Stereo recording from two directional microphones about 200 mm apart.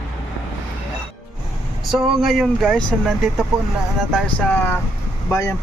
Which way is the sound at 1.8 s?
Centre (ahead or behind).